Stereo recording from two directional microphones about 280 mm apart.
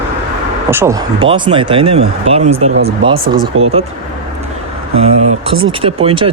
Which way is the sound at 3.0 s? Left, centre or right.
Right.